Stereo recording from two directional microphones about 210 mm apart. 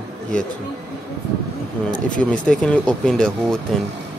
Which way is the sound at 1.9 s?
5° left (ahead or behind).